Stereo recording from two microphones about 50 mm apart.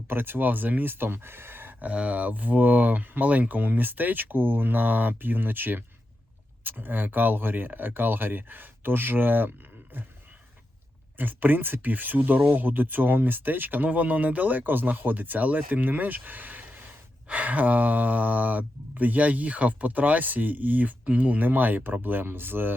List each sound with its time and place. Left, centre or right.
0.1 s speech: right
1.9 s speech: right
11.2 s speech: right